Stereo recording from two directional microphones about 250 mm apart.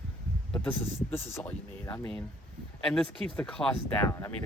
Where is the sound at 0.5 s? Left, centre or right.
Centre.